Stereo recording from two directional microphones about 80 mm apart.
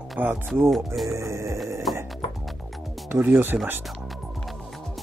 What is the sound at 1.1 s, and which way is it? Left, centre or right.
Music, right.